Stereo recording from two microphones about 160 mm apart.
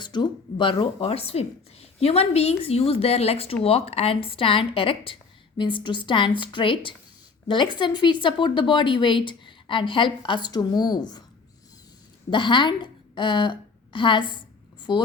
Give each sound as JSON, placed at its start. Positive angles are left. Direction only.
{"t": 0.0, "sound": "speech", "side_deg": 30}
{"t": 12.3, "sound": "a woman's voice", "side_deg": 30}
{"t": 14.8, "sound": "a sound", "side_deg": 30}